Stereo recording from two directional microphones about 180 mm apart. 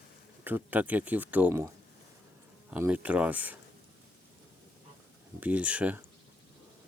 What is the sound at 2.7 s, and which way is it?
Speech, 10° right (ahead or behind).